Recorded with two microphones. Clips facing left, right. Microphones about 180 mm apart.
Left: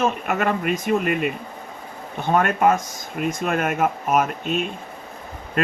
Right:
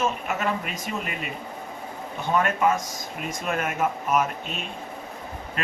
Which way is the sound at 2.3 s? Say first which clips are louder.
Left 4 dB; 50° left (ahead or behind).